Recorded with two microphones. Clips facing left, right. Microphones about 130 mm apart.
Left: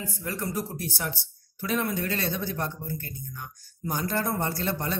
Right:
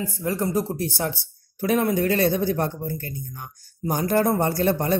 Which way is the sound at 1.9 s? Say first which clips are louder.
Right 9 dB; 25° right (ahead or behind).